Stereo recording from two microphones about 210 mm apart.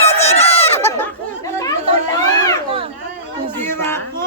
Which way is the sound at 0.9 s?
10° left (ahead or behind).